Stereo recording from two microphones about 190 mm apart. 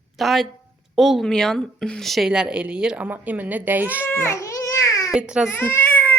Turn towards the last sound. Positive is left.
turn(degrees=10)  # may be behind; listen again after turning